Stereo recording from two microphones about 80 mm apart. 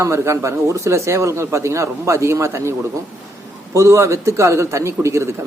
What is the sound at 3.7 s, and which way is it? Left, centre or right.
Speech, right.